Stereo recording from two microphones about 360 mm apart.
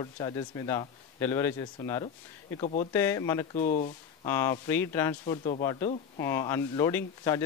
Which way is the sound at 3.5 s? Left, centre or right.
Centre.